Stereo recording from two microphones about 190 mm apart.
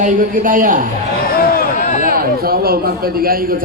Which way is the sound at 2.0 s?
50° right (ahead or behind).